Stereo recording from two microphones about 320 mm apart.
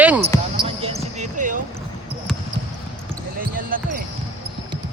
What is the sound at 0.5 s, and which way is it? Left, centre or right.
Basketball bounce, centre.